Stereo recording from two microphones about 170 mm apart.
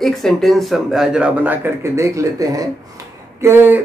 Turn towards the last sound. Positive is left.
turn(degrees=-15)  # may be behind; listen again after turning